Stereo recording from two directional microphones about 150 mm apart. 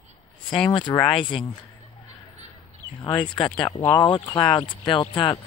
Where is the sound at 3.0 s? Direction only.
30° left (ahead or behind).